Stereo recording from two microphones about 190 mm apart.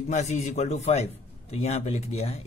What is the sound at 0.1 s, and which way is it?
A man's voice, 35° left (ahead or behind).